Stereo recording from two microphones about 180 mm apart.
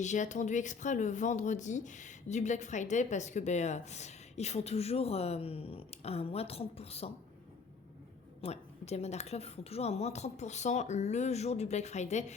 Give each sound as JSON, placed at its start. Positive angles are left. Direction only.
{"t": 0.0, "sound": "speech", "side_deg": 40}
{"t": 8.4, "sound": "speech", "side_deg": 35}